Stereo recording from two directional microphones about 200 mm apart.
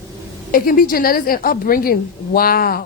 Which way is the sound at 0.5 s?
45° left (ahead or behind).